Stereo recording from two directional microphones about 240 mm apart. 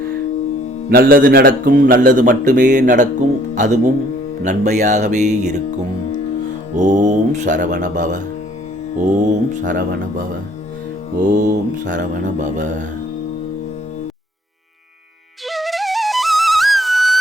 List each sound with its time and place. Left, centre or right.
0.9 s a man's voice: right
6.7 s a man's voice: right
9.5 s a man's voice: right
11.3 s a man's voice: right
15.4 s flute: centre